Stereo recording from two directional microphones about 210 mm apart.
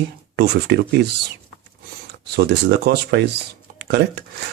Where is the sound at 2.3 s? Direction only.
50° right (ahead or behind).